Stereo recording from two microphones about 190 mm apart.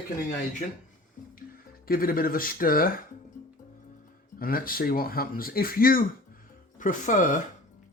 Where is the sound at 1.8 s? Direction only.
50° left (ahead or behind).